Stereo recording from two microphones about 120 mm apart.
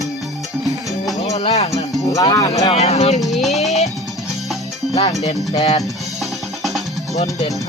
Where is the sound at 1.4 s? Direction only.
60° left (ahead or behind).